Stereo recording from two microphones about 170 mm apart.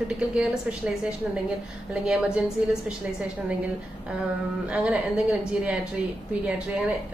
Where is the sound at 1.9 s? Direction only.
5° right (ahead or behind).